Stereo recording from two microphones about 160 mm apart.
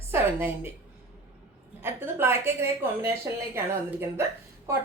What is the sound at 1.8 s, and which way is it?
Speech, 15° right (ahead or behind).